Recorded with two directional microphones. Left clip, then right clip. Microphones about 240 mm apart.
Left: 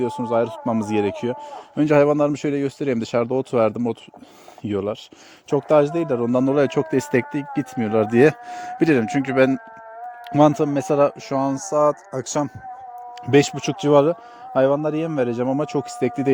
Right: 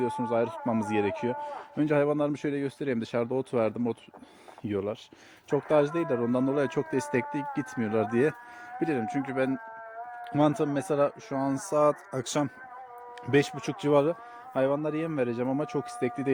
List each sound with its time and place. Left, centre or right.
0.0 s speech: left
11.4 s speech: centre
13.2 s speech: left